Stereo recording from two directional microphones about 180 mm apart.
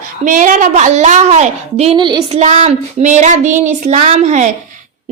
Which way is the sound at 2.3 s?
40° right (ahead or behind).